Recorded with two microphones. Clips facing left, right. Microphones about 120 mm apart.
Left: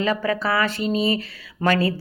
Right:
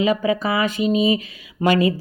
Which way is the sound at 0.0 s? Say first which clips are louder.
Right 3 dB; 15° right (ahead or behind).